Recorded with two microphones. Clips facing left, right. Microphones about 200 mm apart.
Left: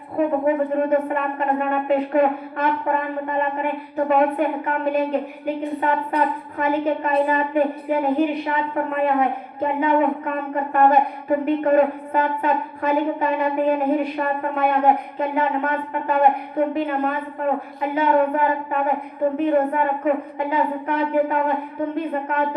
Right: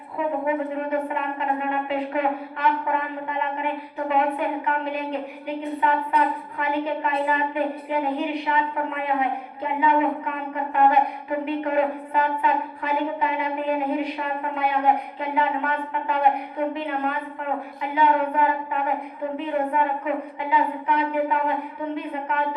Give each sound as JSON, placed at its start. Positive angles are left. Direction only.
{"t": 0.2, "sound": "a woman's voice", "side_deg": 45}
{"t": 6.6, "sound": "a woman's voice", "side_deg": 45}